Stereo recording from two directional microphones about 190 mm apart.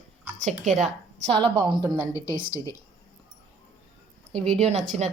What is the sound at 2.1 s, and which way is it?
Speech, 45° right (ahead or behind).